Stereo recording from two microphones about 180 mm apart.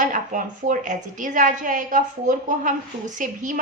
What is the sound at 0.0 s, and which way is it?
A woman's voice, 45° right (ahead or behind).